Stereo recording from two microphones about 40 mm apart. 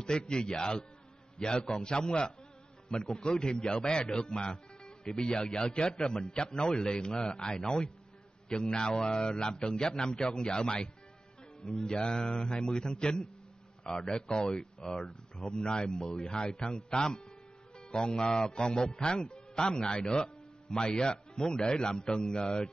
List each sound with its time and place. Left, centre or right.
0.2 s a man's voice: centre